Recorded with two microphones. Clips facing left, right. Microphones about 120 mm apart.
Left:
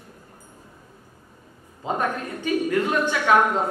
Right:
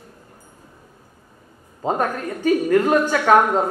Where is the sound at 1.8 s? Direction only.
40° right (ahead or behind).